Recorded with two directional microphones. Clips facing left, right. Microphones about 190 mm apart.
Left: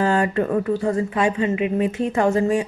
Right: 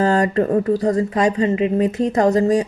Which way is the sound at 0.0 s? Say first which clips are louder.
Right 3 dB; 40° right (ahead or behind).